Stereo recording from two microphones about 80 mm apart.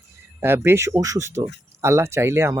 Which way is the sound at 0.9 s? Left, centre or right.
Right.